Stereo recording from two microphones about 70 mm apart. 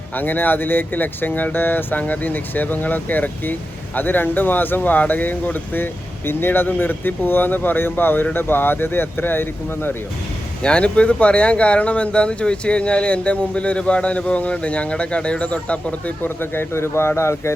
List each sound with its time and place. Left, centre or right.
0.1 s speech: left
10.6 s speech: centre
16.2 s speech: left